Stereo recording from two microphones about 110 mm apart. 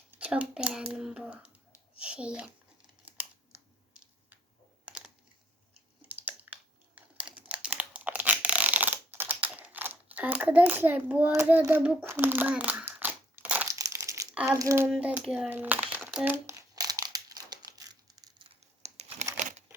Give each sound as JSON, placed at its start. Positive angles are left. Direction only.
{"t": 0.2, "sound": "a child's voice", "side_deg": -10}
{"t": 4.9, "sound": "computer keyboard", "side_deg": -10}
{"t": 6.1, "sound": "crumpling", "side_deg": -15}
{"t": 13.7, "sound": "crumpling", "side_deg": -30}
{"t": 14.5, "sound": "child singing", "side_deg": -30}
{"t": 14.8, "sound": "a child's voice", "side_deg": -10}
{"t": 15.4, "sound": "speech", "side_deg": -15}
{"t": 16.2, "sound": "crumpling", "side_deg": -25}
{"t": 18.8, "sound": "computer keyboard", "side_deg": -75}